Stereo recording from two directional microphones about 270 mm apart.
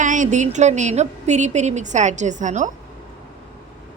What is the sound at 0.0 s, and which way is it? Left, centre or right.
A woman's voice, right.